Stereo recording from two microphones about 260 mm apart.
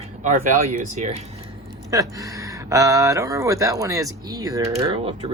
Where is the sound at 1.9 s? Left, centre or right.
Centre.